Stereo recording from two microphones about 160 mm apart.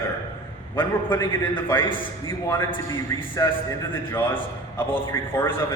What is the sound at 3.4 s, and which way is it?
Speech, 20° left (ahead or behind).